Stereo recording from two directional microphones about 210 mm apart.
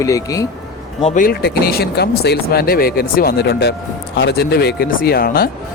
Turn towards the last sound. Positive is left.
turn(degrees=45)  # may be behind; listen again after turning